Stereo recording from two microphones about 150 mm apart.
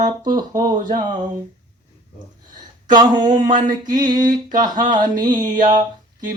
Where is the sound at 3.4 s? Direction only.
60° right (ahead or behind).